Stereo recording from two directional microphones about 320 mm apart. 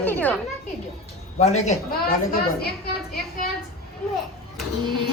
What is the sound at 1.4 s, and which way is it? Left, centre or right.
Speech, left.